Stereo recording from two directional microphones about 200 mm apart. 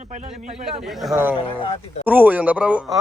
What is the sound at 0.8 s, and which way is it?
Speech, centre (ahead or behind).